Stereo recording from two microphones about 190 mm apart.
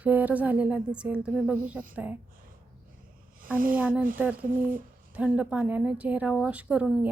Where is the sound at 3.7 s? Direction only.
10° right (ahead or behind).